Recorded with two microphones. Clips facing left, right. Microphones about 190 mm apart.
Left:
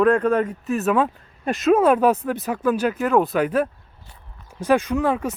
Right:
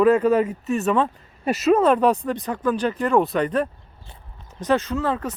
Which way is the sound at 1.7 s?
10° left (ahead or behind).